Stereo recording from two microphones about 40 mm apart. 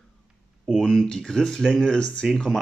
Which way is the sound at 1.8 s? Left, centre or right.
Left.